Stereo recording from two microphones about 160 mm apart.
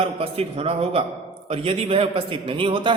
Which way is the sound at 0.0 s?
40° right (ahead or behind).